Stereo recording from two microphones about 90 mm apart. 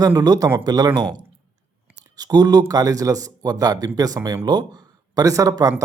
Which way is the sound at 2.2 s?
45° right (ahead or behind).